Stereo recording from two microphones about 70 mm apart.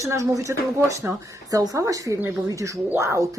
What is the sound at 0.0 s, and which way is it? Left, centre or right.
Speech, right.